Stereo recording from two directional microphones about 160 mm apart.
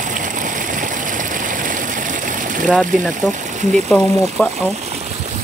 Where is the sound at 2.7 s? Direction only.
Centre (ahead or behind).